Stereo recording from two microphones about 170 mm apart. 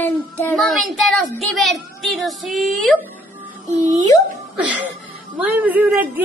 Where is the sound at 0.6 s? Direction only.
Centre (ahead or behind).